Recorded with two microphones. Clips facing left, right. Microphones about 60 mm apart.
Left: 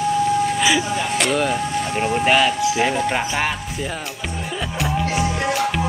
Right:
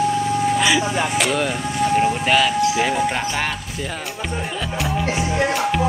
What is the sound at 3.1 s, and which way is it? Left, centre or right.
Music, centre.